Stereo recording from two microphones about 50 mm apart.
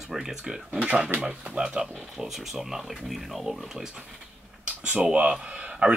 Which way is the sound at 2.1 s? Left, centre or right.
Centre.